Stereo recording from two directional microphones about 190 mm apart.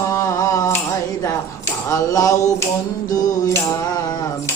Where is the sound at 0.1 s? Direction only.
20° left (ahead or behind).